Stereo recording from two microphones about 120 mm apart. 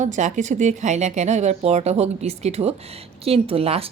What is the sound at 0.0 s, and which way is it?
Speech, 90° right.